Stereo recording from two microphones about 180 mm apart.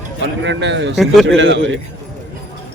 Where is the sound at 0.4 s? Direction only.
85° right.